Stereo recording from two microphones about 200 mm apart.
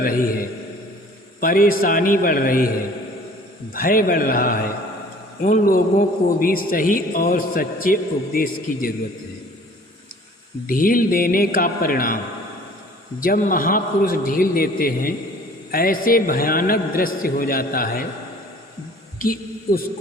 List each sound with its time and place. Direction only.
1.4 s a man's voice: 45° left (ahead or behind)
3.7 s a man's voice: 45° left (ahead or behind)
10.7 s a man's voice: 45° left (ahead or behind)
19.2 s a sound: 45° left (ahead or behind)